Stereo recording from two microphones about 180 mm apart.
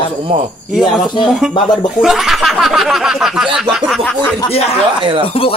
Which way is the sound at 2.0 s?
Centre (ahead or behind).